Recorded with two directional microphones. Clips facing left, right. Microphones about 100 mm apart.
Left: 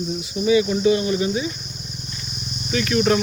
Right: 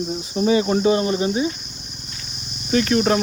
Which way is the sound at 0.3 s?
40° right (ahead or behind).